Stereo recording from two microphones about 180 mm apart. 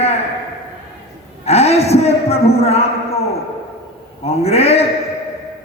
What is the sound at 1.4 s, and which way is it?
A man's voice, 35° left (ahead or behind).